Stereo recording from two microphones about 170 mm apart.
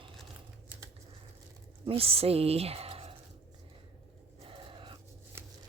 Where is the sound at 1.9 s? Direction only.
35° right (ahead or behind).